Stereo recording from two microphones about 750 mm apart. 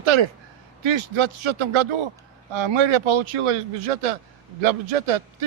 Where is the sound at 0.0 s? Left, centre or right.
Right.